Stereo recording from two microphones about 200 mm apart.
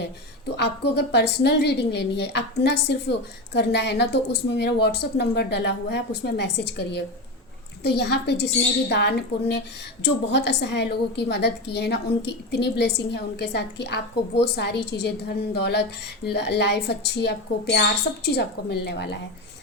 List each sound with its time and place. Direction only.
0.0 s a woman's voice: 55° left (ahead or behind)